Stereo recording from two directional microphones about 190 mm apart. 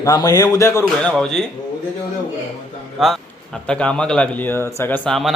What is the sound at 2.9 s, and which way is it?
Speech, centre (ahead or behind).